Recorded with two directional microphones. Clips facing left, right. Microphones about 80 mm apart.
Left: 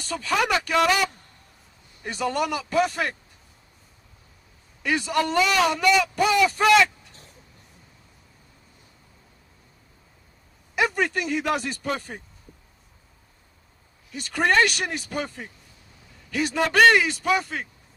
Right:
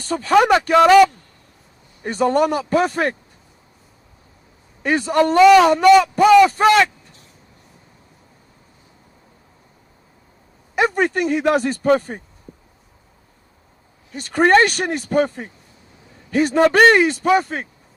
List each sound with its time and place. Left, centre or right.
0.0 s speech: right
4.8 s a man's voice: right
6.4 s a sound: right
10.8 s speech: right
14.1 s speech: right